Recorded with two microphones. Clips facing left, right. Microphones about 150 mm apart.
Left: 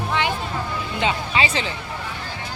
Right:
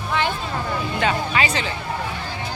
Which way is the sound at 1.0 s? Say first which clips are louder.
Even; 25° left (ahead or behind).